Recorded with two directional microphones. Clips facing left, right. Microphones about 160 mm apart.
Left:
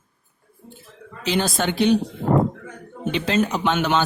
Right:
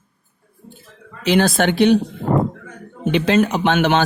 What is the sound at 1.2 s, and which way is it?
Speech, 70° right (ahead or behind).